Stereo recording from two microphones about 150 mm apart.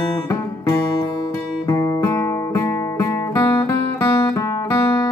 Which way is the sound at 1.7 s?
20° left (ahead or behind).